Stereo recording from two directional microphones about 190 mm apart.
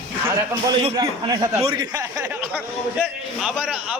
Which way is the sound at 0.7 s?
25° right (ahead or behind).